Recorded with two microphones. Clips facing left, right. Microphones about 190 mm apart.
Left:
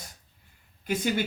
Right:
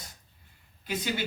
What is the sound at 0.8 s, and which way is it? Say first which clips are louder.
Speech: left 4 dB; 50° left (ahead or behind).